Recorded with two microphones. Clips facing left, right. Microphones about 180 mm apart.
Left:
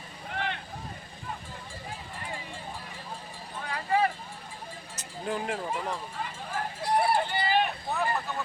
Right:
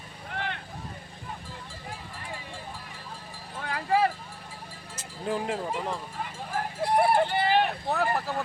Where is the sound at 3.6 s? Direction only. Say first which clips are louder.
Right 2 dB; 65° right (ahead or behind).